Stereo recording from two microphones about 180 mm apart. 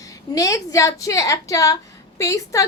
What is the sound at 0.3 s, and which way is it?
A woman's voice, 20° left (ahead or behind).